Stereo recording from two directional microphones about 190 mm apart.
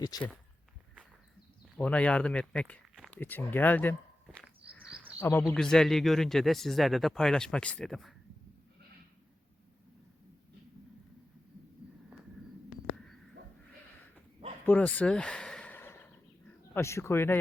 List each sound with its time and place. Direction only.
0.1 s speech: 20° left (ahead or behind)
1.7 s speech: 5° left (ahead or behind)
14.6 s a sound: 10° left (ahead or behind)
16.7 s speech: 15° left (ahead or behind)